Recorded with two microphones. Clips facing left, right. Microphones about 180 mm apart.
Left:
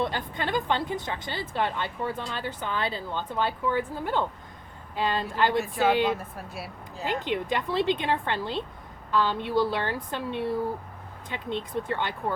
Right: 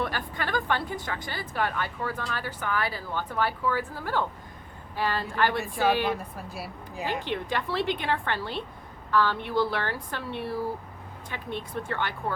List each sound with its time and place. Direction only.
0.0 s speech: 20° left (ahead or behind)
6.1 s speech: centre (ahead or behind)
7.3 s a woman's voice: 20° left (ahead or behind)